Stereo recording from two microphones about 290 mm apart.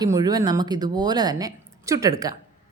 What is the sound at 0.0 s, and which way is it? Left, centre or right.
A woman's voice, centre.